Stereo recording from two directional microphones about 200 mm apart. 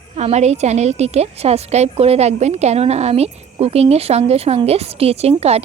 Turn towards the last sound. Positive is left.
turn(degrees=-30)  # may be behind; listen again after turning